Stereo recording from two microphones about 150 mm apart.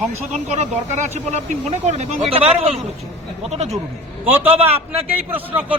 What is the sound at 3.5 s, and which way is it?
Speech, 45° right (ahead or behind).